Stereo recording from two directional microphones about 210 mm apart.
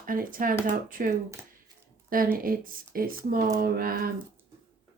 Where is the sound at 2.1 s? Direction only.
45° right (ahead or behind).